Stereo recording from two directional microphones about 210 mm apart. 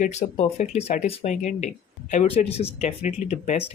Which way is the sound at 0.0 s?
35° left (ahead or behind).